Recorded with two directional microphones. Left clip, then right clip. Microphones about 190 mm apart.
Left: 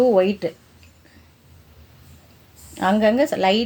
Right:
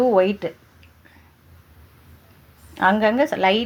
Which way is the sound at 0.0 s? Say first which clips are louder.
Left 1 dB; 10° left (ahead or behind).